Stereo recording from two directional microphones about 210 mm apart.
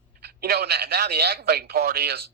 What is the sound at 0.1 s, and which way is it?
A man's voice, 45° right (ahead or behind).